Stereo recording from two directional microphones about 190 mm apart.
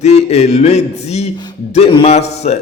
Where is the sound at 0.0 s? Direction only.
35° left (ahead or behind).